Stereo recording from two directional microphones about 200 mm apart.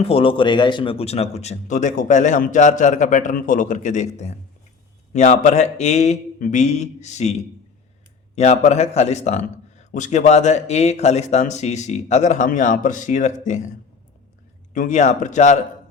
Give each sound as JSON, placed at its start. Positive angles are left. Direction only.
{"t": 0.0, "sound": "a man's voice", "side_deg": 30}